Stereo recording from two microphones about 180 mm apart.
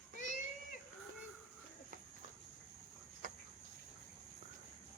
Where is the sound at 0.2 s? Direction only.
45° left (ahead or behind).